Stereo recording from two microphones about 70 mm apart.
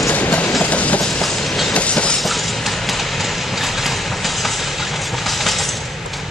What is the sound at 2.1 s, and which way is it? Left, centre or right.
Vehicle, centre.